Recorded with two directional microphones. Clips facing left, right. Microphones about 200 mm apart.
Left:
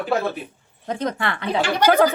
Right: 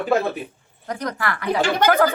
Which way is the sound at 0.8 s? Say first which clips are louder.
Left 2 dB; 25° left (ahead or behind).